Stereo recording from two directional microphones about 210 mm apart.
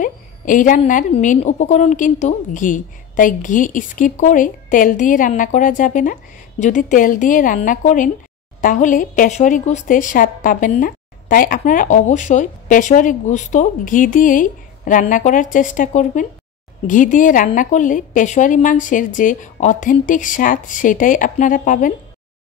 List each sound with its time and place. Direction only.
0.0 s speech: 40° left (ahead or behind)